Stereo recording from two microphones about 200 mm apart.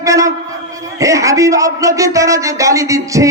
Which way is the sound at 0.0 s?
15° right (ahead or behind).